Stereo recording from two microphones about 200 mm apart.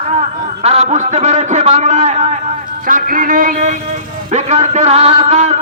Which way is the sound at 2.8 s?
45° right (ahead or behind).